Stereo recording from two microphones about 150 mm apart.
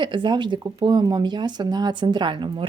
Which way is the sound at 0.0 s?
30° right (ahead or behind).